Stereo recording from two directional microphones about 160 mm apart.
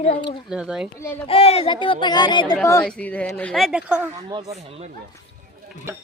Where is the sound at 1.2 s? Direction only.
35° left (ahead or behind).